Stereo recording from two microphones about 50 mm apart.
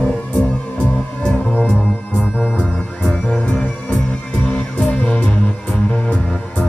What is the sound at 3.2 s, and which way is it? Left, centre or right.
Music, left.